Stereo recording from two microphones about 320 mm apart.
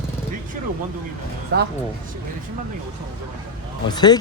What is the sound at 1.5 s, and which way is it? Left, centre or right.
Speech, right.